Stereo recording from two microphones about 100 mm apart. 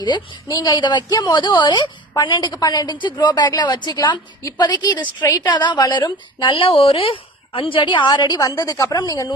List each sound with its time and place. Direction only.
0.0 s a woman's voice: 40° left (ahead or behind)
6.4 s a woman's voice: 60° left (ahead or behind); by 9.3 s 35° left (ahead or behind)